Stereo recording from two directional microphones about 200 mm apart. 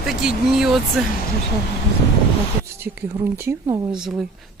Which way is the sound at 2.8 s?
10° right (ahead or behind).